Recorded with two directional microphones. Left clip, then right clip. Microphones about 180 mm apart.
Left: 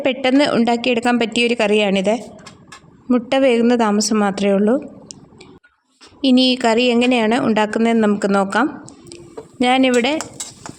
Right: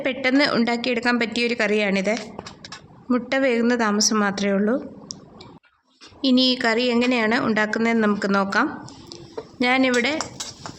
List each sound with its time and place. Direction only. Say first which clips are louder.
0.0 s a woman's voice: left 4 dB; 25° left (ahead or behind)
6.2 s a woman's voice: left 4 dB; 25° left (ahead or behind)